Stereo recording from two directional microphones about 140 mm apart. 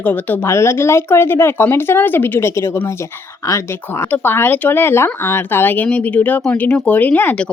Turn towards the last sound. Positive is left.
turn(degrees=10)  # may be behind; listen again after turning